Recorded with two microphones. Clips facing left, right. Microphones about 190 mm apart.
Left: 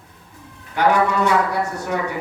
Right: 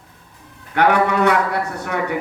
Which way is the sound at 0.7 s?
60° right (ahead or behind).